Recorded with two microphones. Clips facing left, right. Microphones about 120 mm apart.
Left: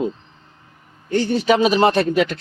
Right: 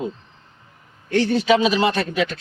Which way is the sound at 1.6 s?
45° left (ahead or behind).